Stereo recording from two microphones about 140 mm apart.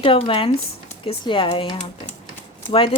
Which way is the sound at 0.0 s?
40° left (ahead or behind).